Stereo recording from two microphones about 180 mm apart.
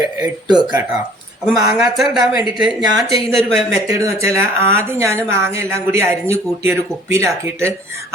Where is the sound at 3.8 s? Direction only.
15° right (ahead or behind).